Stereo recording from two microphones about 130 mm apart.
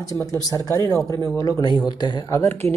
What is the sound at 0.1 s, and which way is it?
Speech, 25° left (ahead or behind).